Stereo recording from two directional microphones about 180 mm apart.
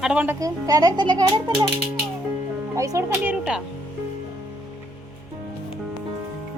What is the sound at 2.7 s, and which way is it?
Speech, 20° right (ahead or behind).